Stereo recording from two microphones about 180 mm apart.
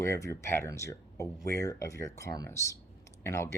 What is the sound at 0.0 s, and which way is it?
Speech, 15° left (ahead or behind).